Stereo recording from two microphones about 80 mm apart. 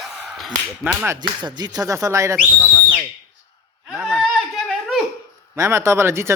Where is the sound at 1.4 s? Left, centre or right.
Right.